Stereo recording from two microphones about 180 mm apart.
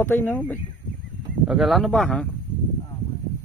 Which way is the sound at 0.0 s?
10° left (ahead or behind).